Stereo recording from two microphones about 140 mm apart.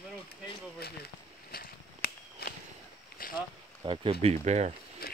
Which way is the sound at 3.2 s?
90° left.